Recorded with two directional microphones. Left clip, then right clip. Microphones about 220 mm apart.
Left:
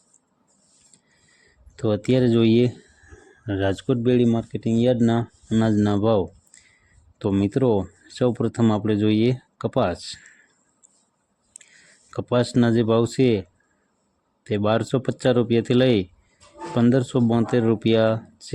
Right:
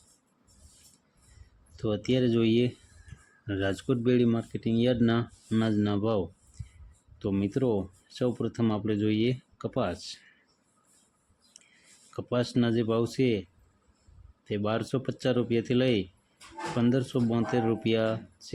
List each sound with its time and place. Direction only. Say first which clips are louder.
1.7 s speech: left 7 dB; 25° left (ahead or behind)
12.1 s speech: left 8 dB; 25° left (ahead or behind)
14.4 s speech: left 9 dB; 25° left (ahead or behind)